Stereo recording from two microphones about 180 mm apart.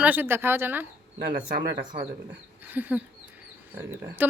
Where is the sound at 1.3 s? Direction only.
25° right (ahead or behind).